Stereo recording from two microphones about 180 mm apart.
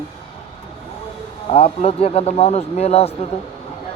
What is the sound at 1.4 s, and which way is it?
Speech, 35° left (ahead or behind).